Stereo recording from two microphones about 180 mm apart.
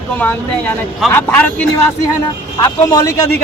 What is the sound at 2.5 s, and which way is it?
Speech, 20° left (ahead or behind).